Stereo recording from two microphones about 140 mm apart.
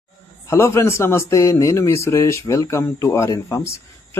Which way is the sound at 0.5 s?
20° left (ahead or behind).